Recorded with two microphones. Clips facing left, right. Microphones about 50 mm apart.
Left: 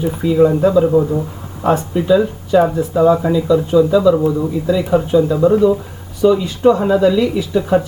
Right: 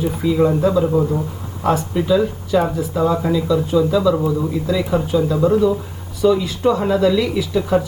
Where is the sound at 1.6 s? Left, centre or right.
Left.